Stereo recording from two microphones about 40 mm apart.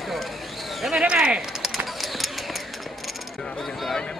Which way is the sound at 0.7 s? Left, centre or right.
Centre.